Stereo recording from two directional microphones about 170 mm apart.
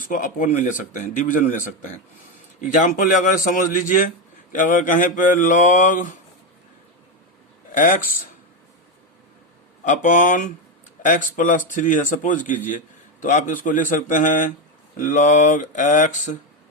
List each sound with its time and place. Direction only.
0.0 s a man's voice: 50° left (ahead or behind)
7.7 s a man's voice: 50° left (ahead or behind)
9.8 s a man's voice: 50° left (ahead or behind)